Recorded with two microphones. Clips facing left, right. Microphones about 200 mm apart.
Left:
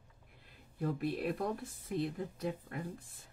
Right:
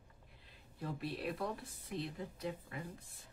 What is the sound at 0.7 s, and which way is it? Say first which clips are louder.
Speech: left 7 dB; 50° left (ahead or behind).